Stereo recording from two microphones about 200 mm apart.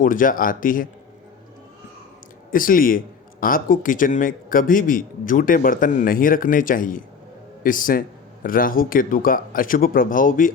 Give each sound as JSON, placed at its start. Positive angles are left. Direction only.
{"t": 0.0, "sound": "speech", "side_deg": 45}
{"t": 2.5, "sound": "speech", "side_deg": 45}